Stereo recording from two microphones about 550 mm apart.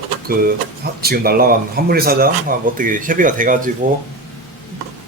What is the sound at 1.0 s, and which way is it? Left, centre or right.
Speech, centre.